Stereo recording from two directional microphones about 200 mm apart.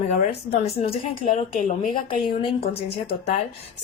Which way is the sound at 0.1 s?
35° left (ahead or behind).